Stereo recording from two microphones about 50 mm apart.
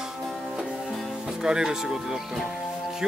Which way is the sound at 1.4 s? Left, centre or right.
Centre.